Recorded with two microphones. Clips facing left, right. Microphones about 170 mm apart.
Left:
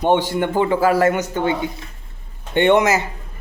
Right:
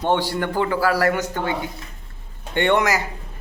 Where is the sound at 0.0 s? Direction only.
20° left (ahead or behind).